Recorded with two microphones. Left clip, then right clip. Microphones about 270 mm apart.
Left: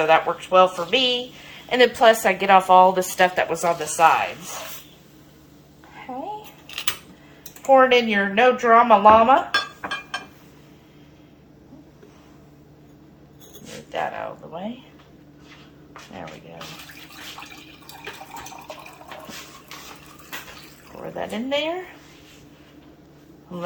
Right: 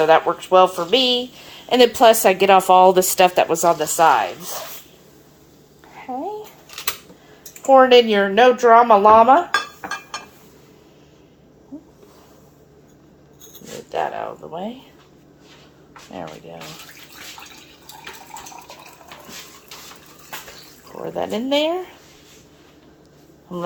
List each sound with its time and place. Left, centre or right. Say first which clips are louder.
0.0 s speech: right 3 dB; right
7.7 s speech: right 4 dB; right
13.9 s a sound: right 3 dB; right
21.2 s speech: right 5 dB; right